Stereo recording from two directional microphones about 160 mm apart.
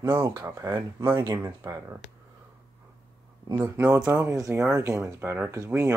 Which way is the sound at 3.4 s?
20° right (ahead or behind).